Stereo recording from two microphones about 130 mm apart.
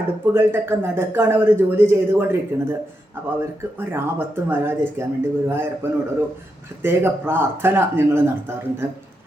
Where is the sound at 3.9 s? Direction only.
15° right (ahead or behind).